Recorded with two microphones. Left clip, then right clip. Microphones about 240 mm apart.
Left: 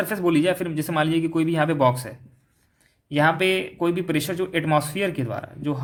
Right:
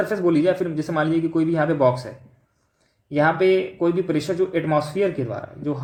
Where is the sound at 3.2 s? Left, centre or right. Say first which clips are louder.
Right 3 dB; left.